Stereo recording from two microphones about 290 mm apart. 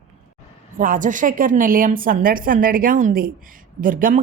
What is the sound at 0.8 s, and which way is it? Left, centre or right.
A man's voice, right.